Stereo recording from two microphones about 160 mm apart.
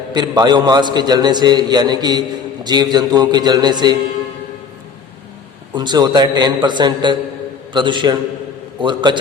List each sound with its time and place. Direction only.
0.1 s a man's voice: 25° right (ahead or behind)
5.7 s a man's voice: 25° right (ahead or behind)